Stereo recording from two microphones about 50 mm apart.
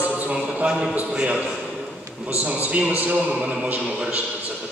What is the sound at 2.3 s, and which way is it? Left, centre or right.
Speech, right.